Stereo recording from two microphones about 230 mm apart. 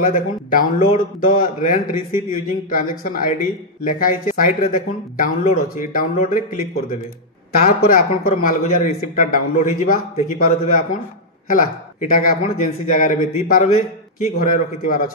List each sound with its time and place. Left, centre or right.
0.0 s a man's voice: left
7.6 s a man's voice: left